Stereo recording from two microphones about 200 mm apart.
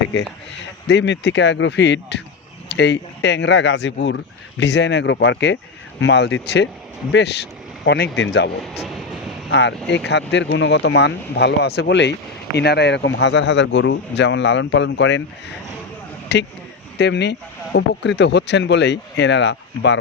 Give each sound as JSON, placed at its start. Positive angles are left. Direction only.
{"t": 0.0, "sound": "a man's voice", "side_deg": 65}
{"t": 9.5, "sound": "a man's voice", "side_deg": 65}